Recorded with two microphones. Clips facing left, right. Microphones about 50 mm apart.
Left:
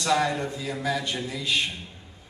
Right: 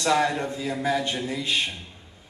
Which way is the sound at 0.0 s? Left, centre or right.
Right.